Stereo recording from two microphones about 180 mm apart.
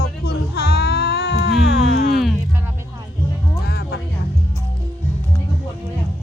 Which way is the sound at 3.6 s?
60° left (ahead or behind).